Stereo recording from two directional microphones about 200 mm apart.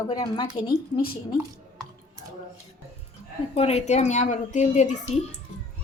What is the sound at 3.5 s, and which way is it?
A child's voice, 30° left (ahead or behind).